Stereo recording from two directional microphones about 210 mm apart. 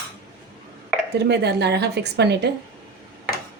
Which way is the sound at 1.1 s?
50° right (ahead or behind).